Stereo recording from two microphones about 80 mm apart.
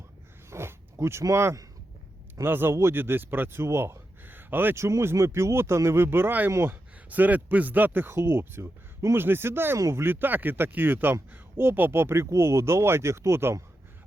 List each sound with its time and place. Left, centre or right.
0.5 s a sound: right
1.2 s speech: right
7.1 s speech: right